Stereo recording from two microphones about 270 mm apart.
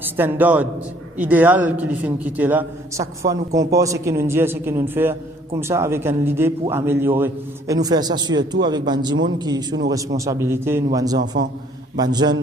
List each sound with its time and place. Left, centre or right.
0.0 s a man's voice: centre